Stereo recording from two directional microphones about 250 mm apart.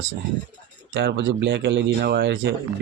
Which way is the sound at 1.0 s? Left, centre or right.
Right.